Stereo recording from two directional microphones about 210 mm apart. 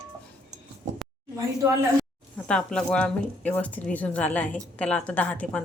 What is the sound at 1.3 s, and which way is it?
Speech, 15° right (ahead or behind).